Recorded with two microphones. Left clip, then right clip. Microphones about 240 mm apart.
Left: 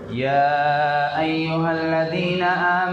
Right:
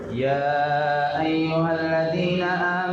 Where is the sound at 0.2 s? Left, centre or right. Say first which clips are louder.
Left 4 dB; left.